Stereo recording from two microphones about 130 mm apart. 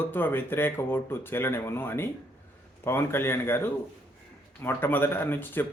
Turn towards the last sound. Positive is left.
turn(degrees=15)  # may be behind; listen again after turning